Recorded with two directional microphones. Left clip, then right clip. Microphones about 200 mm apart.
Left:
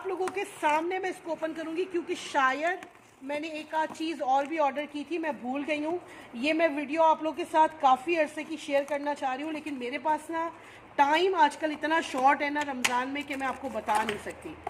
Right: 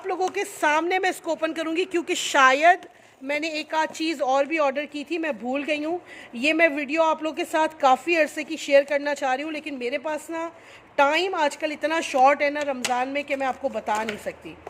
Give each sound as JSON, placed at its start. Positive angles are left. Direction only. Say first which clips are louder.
{"t": 0.1, "sound": "speech", "louder": "right 7 dB", "side_deg": -60}